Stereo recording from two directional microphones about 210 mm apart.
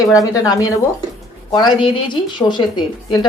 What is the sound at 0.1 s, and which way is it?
A woman's voice, 15° left (ahead or behind).